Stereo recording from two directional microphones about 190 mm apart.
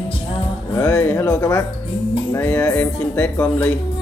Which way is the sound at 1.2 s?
5° left (ahead or behind).